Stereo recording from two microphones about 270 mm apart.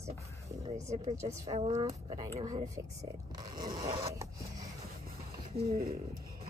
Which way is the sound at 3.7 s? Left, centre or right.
Centre.